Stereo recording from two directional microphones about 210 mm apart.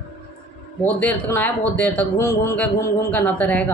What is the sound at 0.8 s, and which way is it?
A man's voice, 5° left (ahead or behind).